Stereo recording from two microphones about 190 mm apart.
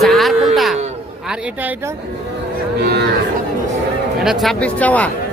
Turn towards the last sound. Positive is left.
turn(degrees=5)  # may be behind; listen again after turning